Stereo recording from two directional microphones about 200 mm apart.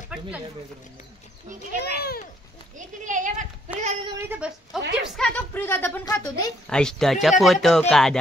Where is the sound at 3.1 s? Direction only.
40° right (ahead or behind).